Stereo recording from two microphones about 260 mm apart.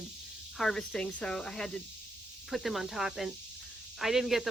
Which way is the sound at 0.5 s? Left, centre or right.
Centre.